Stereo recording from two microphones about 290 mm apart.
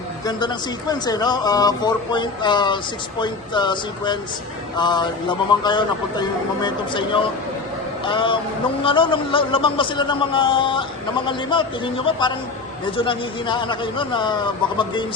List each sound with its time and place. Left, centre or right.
0.3 s a man's voice: centre